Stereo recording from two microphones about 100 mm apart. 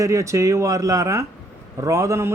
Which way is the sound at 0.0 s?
30° right (ahead or behind).